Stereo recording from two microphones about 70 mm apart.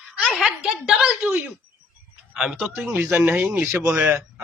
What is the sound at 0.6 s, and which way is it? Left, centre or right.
Speech, centre.